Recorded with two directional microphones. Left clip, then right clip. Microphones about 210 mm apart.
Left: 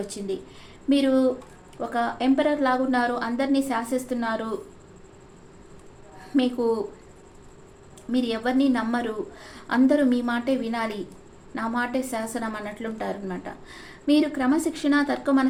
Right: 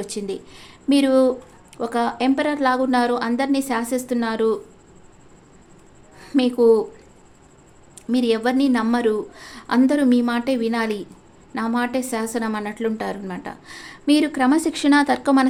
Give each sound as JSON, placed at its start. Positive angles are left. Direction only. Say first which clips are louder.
{"t": 0.1, "sound": "a woman's voice", "louder": "right 3 dB", "side_deg": -55}
{"t": 6.1, "sound": "a woman's voice", "louder": "right 6 dB", "side_deg": -55}
{"t": 8.1, "sound": "a woman's voice", "louder": "right 5 dB", "side_deg": -60}